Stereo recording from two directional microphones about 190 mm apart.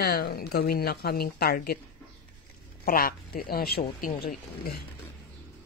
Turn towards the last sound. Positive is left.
turn(degrees=50)  # may be behind; listen again after turning